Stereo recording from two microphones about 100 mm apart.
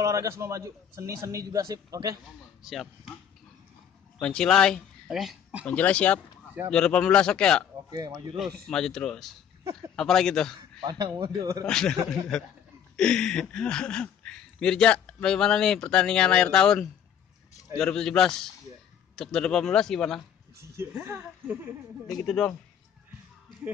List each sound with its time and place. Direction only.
0.0 s a man's voice: 30° right (ahead or behind)
2.6 s speech: centre (ahead or behind)
4.2 s speech: 5° left (ahead or behind)
5.7 s speech: 15° left (ahead or behind)
7.9 s a man's voice: 35° right (ahead or behind)
8.4 s speech: 10° left (ahead or behind)
10.8 s a man's voice: 40° right (ahead or behind)
11.6 s speech: 5° left (ahead or behind)
20.7 s speech: 25° right (ahead or behind)
22.2 s speech: 5° left (ahead or behind)